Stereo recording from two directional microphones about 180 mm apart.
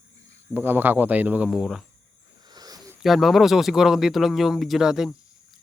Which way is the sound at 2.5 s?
20° right (ahead or behind).